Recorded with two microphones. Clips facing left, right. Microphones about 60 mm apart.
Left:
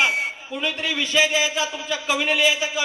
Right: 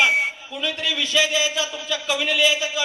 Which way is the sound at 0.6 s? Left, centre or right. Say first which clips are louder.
Even; left.